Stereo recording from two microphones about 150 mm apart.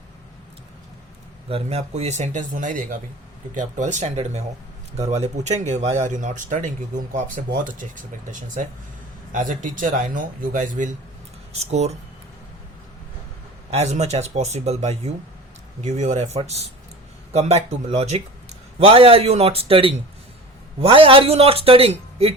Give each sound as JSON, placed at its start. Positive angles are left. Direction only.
{"t": 1.5, "sound": "speech", "side_deg": -40}
{"t": 11.5, "sound": "speech", "side_deg": -45}
{"t": 13.7, "sound": "a man's voice", "side_deg": -45}